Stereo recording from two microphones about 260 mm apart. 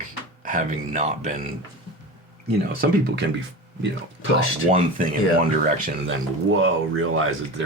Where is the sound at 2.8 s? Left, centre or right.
Right.